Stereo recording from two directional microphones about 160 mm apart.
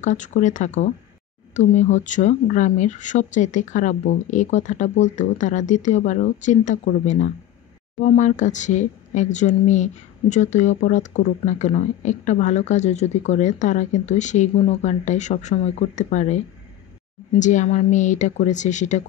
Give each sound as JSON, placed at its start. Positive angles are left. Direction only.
{"t": 0.0, "sound": "speech", "side_deg": 50}